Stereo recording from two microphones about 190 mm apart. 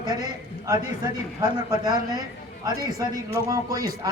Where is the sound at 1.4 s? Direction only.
20° right (ahead or behind).